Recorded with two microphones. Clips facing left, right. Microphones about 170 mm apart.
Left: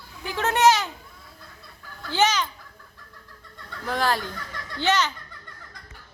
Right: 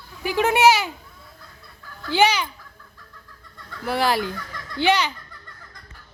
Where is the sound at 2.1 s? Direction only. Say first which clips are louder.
Right 3 dB; 10° right (ahead or behind).